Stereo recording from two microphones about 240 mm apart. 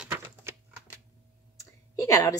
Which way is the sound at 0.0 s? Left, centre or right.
Centre.